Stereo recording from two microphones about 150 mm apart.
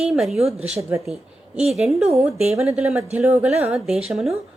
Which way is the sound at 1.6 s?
5° right (ahead or behind).